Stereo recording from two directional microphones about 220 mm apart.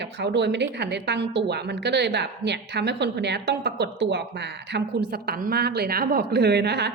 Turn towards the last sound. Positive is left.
turn(degrees=-50)  # may be behind; listen again after turning